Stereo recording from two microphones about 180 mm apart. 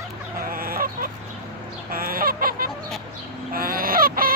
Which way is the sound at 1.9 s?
55° right (ahead or behind).